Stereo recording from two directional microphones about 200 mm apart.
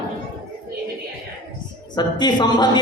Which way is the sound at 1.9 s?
20° left (ahead or behind).